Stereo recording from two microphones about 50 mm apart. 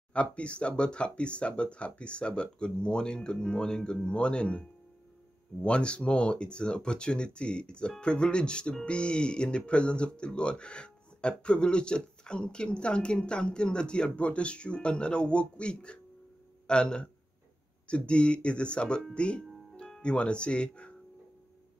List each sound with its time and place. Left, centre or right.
0.1 s speech: left